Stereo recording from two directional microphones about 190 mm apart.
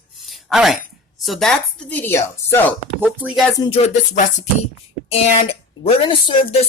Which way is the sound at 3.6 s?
30° left (ahead or behind).